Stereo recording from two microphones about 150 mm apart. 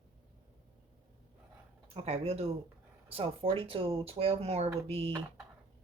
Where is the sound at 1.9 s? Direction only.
40° right (ahead or behind).